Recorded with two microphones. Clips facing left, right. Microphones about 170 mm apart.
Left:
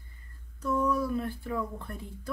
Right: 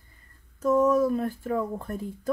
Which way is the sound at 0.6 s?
45° right (ahead or behind).